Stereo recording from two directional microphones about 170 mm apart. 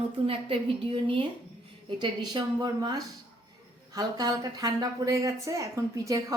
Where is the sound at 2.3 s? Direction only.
25° right (ahead or behind).